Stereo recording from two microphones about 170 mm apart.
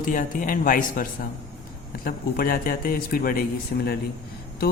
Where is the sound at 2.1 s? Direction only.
60° left (ahead or behind).